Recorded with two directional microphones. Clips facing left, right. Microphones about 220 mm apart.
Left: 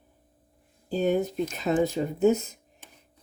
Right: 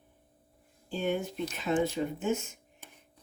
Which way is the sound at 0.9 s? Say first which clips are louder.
Left 7 dB; 40° left (ahead or behind).